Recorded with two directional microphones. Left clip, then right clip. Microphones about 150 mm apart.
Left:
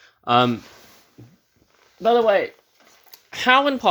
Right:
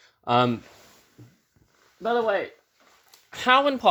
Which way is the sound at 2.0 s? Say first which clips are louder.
Left 7 dB; 55° left (ahead or behind).